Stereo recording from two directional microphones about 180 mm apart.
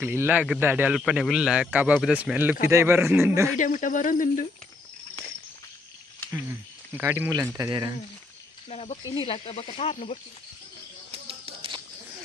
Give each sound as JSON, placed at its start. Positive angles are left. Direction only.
{"t": 0.0, "sound": "a man's voice", "side_deg": -10}
{"t": 3.5, "sound": "speech", "side_deg": 45}
{"t": 6.3, "sound": "a man's voice", "side_deg": -10}
{"t": 8.6, "sound": "speech", "side_deg": 35}
{"t": 11.1, "sound": "a sound", "side_deg": -30}